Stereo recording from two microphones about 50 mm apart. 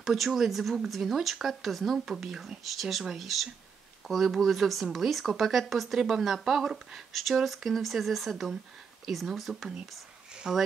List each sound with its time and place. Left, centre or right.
0.0 s speech: centre